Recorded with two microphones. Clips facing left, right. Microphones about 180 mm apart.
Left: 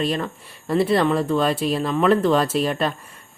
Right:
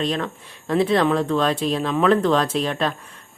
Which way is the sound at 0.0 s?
5° left (ahead or behind).